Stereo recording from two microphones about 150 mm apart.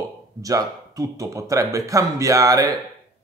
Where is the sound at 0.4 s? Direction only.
25° right (ahead or behind).